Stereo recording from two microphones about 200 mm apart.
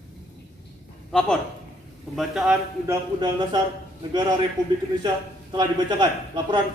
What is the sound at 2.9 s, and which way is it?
Speech, 20° right (ahead or behind).